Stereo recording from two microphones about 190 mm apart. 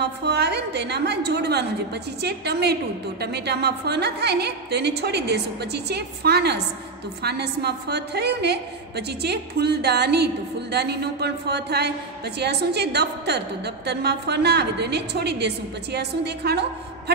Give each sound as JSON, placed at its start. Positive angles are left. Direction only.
{"t": 0.0, "sound": "a woman's voice", "side_deg": -60}